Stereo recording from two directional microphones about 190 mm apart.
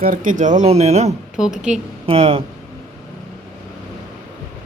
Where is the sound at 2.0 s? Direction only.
30° right (ahead or behind).